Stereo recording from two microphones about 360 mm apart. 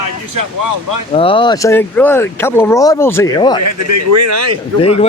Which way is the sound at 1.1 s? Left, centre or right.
Centre.